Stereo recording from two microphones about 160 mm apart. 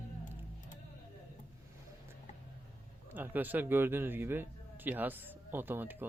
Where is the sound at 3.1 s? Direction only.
10° right (ahead or behind).